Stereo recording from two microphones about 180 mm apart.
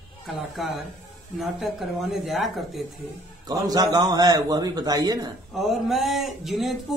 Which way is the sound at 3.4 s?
20° right (ahead or behind).